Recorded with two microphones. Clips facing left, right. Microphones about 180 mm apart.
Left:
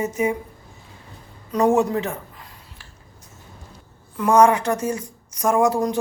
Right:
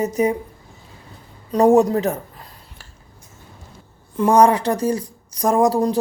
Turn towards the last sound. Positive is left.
turn(degrees=-35)  # may be behind; listen again after turning